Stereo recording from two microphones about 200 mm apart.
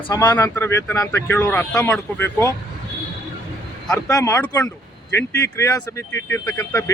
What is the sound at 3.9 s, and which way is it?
Speech, 15° left (ahead or behind).